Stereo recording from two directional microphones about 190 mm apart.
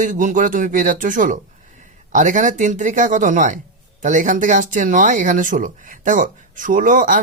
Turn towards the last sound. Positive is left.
turn(degrees=-45)  # may be behind; listen again after turning